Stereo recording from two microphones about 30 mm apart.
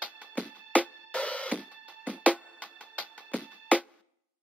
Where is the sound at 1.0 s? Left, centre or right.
Left.